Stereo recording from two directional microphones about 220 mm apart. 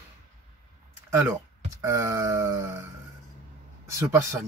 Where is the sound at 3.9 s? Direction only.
15° right (ahead or behind).